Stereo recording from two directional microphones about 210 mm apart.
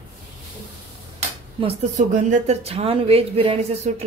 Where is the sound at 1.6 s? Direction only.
35° right (ahead or behind).